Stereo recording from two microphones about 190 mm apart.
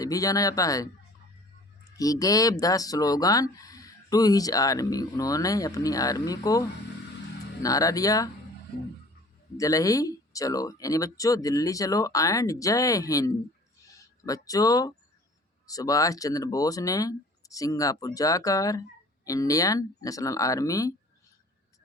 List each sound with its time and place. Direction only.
0.0 s speech: 20° left (ahead or behind)
2.0 s speech: 20° left (ahead or behind)
9.6 s speech: 15° left (ahead or behind)